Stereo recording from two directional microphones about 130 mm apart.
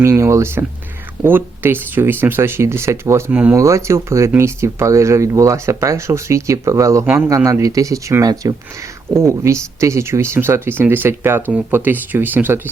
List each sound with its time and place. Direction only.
0.0 s speech: 20° right (ahead or behind)